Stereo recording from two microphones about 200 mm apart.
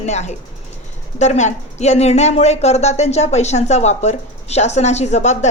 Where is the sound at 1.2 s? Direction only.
35° left (ahead or behind).